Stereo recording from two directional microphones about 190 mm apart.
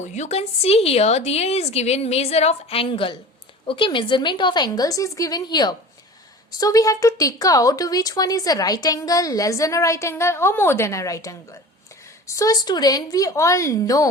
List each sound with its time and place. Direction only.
0.1 s a woman's voice: 35° left (ahead or behind); by 14.1 s 20° left (ahead or behind)